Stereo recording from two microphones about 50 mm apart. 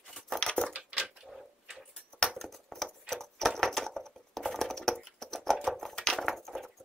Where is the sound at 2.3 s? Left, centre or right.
Centre.